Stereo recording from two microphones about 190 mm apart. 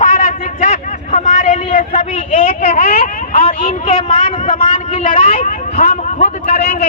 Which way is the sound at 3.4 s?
30° left (ahead or behind).